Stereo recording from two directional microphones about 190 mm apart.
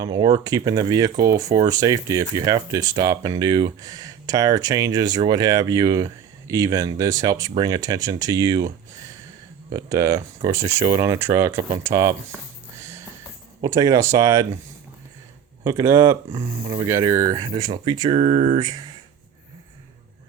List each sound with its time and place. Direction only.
0.0 s speech: 20° right (ahead or behind)
9.7 s speech: 20° right (ahead or behind)
13.6 s speech: 15° right (ahead or behind)
15.6 s speech: 15° right (ahead or behind)